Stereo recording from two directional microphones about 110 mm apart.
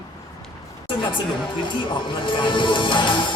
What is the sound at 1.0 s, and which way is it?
Music, 45° left (ahead or behind).